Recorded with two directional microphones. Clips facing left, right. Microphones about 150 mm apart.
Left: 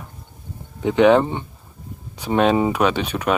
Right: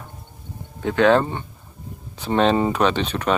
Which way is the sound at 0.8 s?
15° left (ahead or behind).